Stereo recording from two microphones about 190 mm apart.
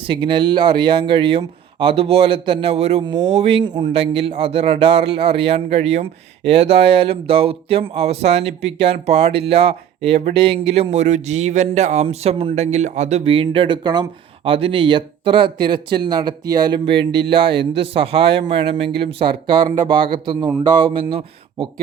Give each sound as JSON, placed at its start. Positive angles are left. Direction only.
{"t": 0.0, "sound": "speech", "side_deg": -25}